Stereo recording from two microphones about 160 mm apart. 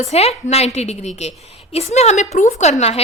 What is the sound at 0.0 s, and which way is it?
A woman's voice, 40° left (ahead or behind).